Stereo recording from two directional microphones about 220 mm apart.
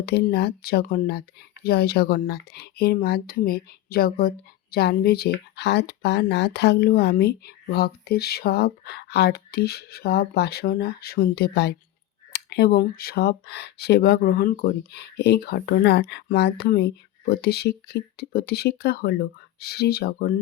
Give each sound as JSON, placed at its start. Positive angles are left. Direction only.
{"t": 0.0, "sound": "speech", "side_deg": 45}